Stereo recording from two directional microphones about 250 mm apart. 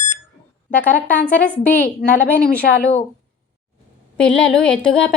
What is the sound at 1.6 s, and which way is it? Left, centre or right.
A woman's voice, left.